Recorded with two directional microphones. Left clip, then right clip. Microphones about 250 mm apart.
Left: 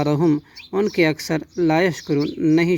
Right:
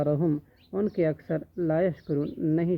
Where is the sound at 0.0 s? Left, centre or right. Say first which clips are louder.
Left 7 dB; left.